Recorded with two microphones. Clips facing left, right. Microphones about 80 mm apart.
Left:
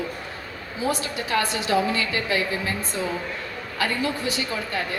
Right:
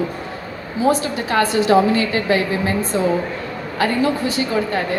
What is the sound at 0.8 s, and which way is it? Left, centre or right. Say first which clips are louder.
A woman's voice: right 8 dB; right.